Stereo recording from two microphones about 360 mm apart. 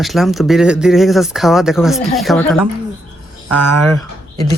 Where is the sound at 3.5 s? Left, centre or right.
Right.